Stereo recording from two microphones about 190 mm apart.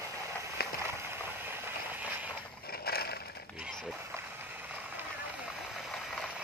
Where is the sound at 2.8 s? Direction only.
55° left (ahead or behind).